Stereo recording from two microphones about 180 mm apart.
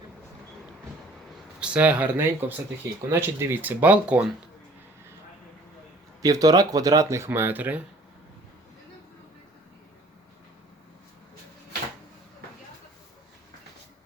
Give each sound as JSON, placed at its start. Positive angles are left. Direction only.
{"t": 1.6, "sound": "speech", "side_deg": -5}
{"t": 6.2, "sound": "speech", "side_deg": -20}